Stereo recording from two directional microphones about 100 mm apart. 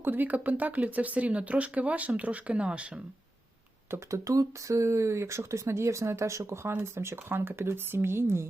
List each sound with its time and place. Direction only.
0.0 s speech: 20° right (ahead or behind)
3.9 s speech: 30° right (ahead or behind)